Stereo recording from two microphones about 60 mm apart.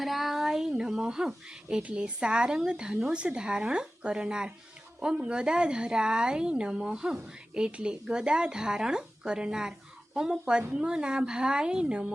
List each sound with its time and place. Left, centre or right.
0.0 s a woman's voice: centre
1.6 s a woman's voice: right